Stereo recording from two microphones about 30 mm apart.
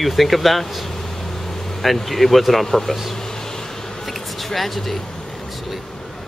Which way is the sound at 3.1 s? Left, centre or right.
Centre.